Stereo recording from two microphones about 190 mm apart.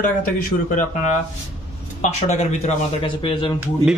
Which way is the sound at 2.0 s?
35° left (ahead or behind).